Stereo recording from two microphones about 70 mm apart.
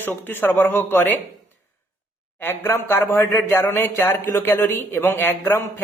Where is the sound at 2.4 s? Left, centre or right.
Left.